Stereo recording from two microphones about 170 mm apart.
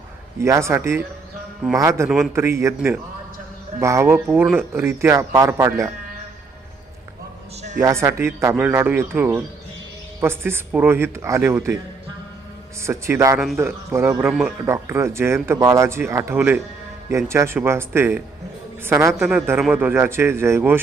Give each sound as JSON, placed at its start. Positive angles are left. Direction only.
{"t": 0.3, "sound": "speech", "side_deg": -15}
{"t": 2.0, "sound": "a man's voice", "side_deg": 0}
{"t": 2.3, "sound": "speech", "side_deg": -15}
{"t": 7.8, "sound": "speech", "side_deg": -15}
{"t": 12.8, "sound": "speech", "side_deg": -15}